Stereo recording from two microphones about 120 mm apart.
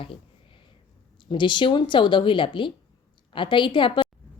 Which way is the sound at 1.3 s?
40° left (ahead or behind).